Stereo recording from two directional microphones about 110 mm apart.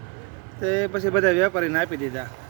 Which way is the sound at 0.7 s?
20° left (ahead or behind).